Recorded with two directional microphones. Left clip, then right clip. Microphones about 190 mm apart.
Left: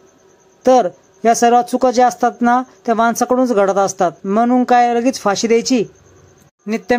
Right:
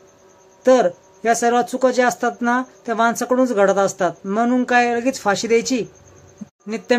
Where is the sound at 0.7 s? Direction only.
30° left (ahead or behind).